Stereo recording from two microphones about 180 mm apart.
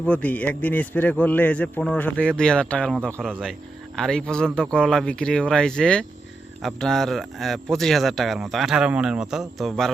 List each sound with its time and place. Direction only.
0.0 s a man's voice: 10° left (ahead or behind)